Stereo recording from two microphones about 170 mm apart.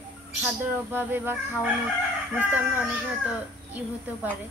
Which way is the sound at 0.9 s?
10° right (ahead or behind).